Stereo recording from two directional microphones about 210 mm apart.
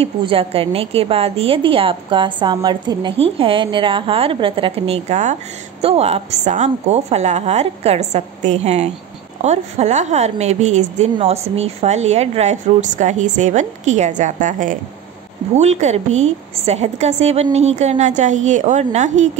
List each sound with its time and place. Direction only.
0.0 s a woman's voice: 25° right (ahead or behind)